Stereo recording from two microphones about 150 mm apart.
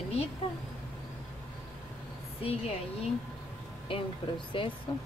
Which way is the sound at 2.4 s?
40° left (ahead or behind).